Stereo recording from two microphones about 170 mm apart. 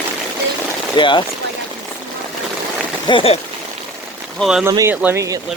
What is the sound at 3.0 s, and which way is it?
Speech, 30° left (ahead or behind).